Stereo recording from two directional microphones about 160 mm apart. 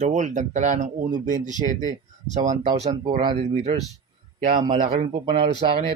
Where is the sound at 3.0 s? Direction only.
30° right (ahead or behind).